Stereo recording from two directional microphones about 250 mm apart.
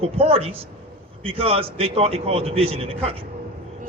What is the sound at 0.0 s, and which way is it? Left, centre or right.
A man's voice, right.